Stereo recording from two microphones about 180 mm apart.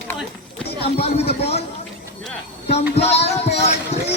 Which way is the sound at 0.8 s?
35° left (ahead or behind).